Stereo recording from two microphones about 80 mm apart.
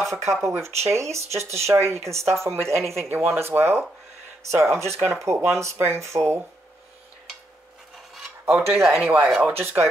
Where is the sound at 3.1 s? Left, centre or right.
Right.